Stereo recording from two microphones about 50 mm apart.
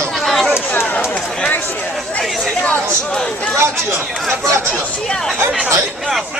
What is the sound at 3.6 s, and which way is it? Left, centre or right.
Speech, right.